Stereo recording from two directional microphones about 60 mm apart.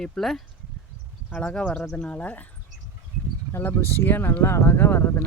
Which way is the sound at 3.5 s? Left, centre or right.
Left.